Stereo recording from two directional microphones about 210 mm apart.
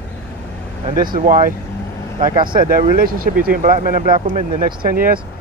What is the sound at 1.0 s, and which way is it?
Speech, 40° right (ahead or behind).